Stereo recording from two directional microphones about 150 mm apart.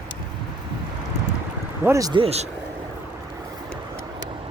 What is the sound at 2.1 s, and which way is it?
Speech, 40° right (ahead or behind).